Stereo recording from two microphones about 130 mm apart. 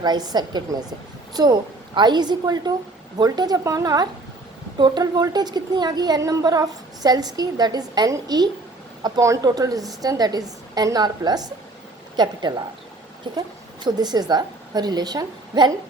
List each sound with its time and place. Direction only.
0.0 s a woman's voice: 30° right (ahead or behind)